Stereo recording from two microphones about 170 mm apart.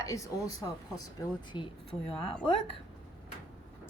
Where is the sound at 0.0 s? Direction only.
20° left (ahead or behind).